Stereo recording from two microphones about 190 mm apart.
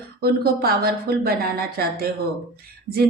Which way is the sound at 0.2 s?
55° right (ahead or behind).